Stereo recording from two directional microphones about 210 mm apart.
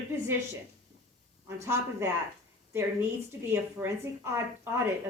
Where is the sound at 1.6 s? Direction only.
15° right (ahead or behind).